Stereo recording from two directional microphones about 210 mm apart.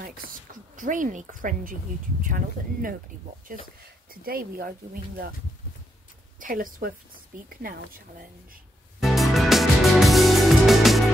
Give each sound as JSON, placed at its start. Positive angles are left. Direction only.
{"t": 0.0, "sound": "a woman's voice", "side_deg": -40}
{"t": 6.4, "sound": "speech", "side_deg": -40}
{"t": 9.0, "sound": "music", "side_deg": 0}